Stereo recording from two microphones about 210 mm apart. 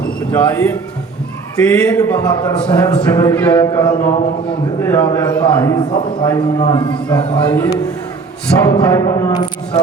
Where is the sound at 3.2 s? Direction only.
10° left (ahead or behind).